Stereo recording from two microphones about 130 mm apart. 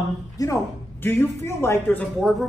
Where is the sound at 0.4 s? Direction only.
25° left (ahead or behind).